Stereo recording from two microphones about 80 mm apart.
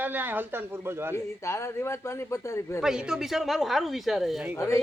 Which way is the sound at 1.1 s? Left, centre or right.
Left.